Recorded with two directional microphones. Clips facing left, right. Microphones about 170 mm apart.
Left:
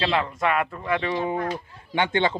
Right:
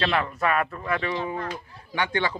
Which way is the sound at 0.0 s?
25° left (ahead or behind).